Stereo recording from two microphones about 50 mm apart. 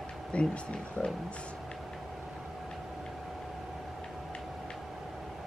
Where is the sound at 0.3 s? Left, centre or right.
Left.